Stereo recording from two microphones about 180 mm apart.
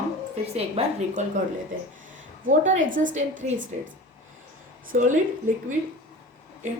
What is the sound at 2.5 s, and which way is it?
Speech, 45° right (ahead or behind).